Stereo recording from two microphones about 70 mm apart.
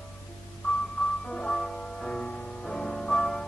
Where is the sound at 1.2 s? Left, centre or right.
Centre.